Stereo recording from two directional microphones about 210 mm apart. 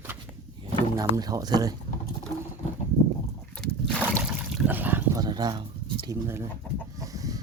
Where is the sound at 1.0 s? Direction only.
15° right (ahead or behind).